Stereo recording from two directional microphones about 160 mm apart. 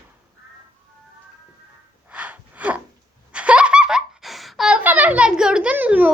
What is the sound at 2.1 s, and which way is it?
Gasp, 10° right (ahead or behind).